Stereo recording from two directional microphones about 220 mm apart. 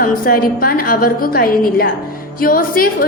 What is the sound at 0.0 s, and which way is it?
A woman's voice, 40° left (ahead or behind).